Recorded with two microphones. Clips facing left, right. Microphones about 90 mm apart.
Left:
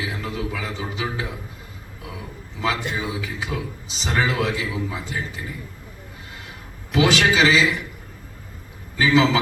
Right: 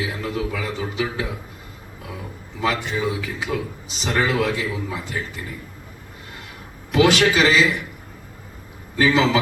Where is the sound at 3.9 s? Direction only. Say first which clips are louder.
Right 2 dB; 55° right (ahead or behind).